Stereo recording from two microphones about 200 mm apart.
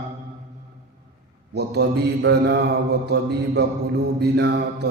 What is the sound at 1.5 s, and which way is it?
Mantra, 55° right (ahead or behind).